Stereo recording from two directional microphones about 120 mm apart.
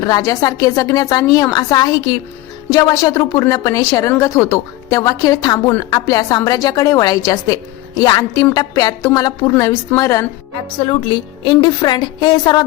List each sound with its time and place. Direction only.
0.0 s a woman's voice: 30° left (ahead or behind)
11.1 s a woman's voice: 40° left (ahead or behind)